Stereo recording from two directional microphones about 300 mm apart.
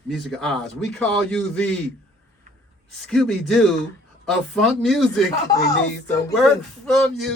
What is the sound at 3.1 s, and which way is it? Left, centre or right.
Speech, centre.